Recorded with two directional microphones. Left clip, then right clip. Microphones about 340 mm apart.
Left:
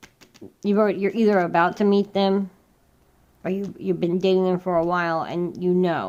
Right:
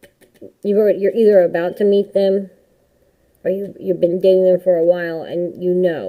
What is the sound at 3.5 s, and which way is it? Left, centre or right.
Speech, centre.